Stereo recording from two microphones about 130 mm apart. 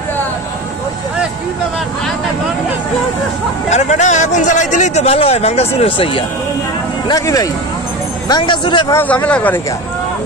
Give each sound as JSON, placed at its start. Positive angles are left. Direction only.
{"t": 3.7, "sound": "speech", "side_deg": 65}
{"t": 7.1, "sound": "a man's voice", "side_deg": 30}
{"t": 8.9, "sound": "speech", "side_deg": 10}